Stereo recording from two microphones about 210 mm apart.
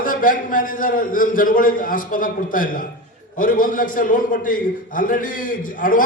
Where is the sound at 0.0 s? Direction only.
40° left (ahead or behind).